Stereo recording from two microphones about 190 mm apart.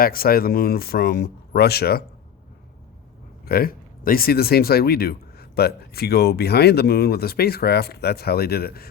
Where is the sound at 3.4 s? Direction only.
50° left (ahead or behind).